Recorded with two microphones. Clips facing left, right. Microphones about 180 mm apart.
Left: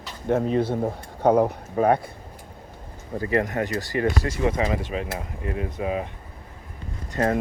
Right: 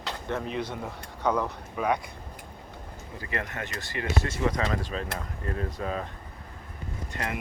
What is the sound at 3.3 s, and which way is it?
Speech, 35° left (ahead or behind).